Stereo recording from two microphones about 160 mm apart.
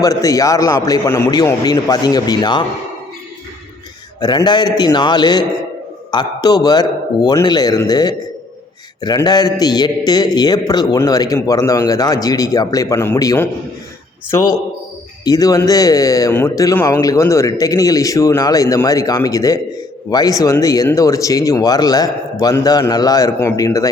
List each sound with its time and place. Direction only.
0.0 s a man's voice: 20° left (ahead or behind)
4.2 s a man's voice: 25° left (ahead or behind)